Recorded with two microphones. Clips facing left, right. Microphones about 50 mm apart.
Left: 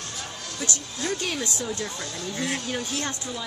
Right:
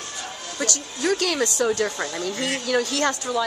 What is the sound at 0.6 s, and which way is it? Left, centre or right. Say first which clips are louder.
Speech: right 4 dB; right.